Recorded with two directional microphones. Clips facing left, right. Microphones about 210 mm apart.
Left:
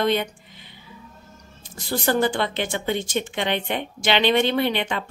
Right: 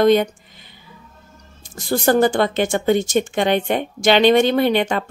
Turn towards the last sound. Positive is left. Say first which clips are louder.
# right 6 dB
turn(degrees=-45)  # may be behind; listen again after turning